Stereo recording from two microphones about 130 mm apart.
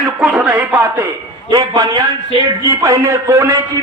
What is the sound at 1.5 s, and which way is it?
A man's voice, 30° right (ahead or behind).